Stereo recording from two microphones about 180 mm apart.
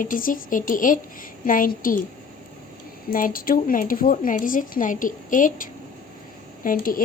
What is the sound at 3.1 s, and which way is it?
Speech, 50° left (ahead or behind).